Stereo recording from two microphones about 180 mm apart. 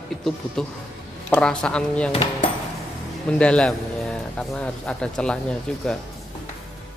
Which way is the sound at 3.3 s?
5° left (ahead or behind).